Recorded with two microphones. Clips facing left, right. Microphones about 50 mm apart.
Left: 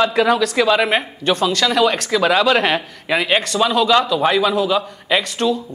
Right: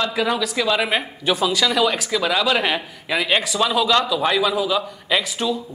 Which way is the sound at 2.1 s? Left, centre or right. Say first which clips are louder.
Left 5 dB; left.